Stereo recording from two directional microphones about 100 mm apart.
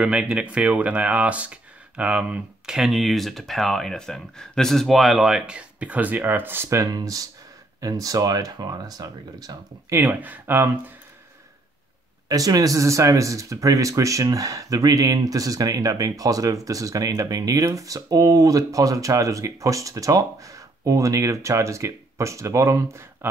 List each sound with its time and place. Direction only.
0.0 s speech: 10° right (ahead or behind); by 9.9 s 40° right (ahead or behind)
9.9 s speech: 20° right (ahead or behind)
12.3 s speech: 35° right (ahead or behind)